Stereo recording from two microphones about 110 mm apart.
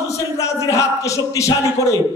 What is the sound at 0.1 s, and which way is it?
A man's voice, 30° left (ahead or behind).